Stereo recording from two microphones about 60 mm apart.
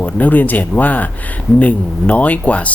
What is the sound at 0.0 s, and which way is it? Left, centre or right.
Speech, left.